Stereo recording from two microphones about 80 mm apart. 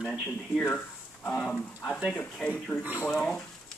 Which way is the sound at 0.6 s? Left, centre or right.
Centre.